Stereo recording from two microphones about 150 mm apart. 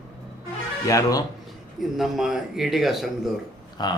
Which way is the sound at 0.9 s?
20° left (ahead or behind).